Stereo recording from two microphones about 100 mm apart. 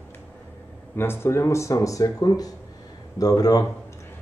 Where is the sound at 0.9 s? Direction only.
25° left (ahead or behind); by 3.6 s 40° left (ahead or behind).